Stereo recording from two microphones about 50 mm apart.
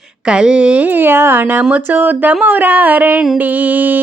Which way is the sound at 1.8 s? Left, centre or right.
Right.